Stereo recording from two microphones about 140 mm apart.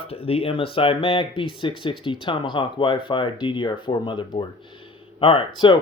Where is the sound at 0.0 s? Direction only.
40° left (ahead or behind).